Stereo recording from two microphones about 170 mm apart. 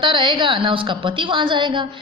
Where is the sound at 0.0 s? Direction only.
30° right (ahead or behind).